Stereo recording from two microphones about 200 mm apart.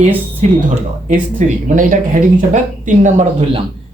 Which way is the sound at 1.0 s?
40° right (ahead or behind).